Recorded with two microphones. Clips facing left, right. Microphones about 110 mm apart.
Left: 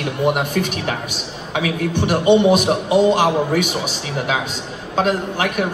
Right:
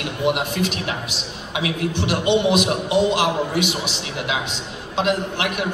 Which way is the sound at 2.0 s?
45° left (ahead or behind).